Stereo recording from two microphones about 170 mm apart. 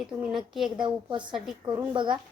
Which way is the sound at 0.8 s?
25° right (ahead or behind).